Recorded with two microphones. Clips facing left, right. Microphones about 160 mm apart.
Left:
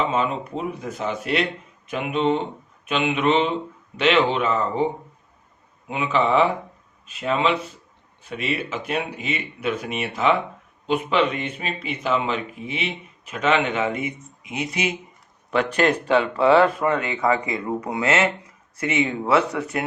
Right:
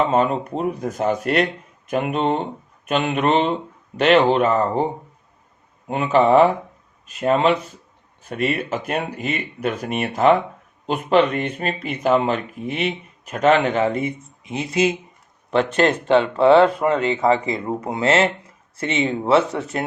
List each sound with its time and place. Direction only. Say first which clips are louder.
0.1 s speech: right 5 dB; 45° right (ahead or behind)
5.9 s speech: right 5 dB; 45° right (ahead or behind); by 19.8 s 25° right (ahead or behind)